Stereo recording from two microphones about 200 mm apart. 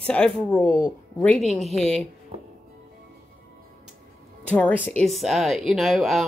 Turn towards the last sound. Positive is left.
turn(degrees=0)  # may be behind; listen again after turning